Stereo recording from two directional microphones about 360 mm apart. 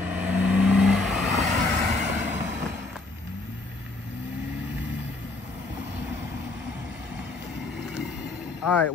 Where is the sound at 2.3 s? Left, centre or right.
Centre.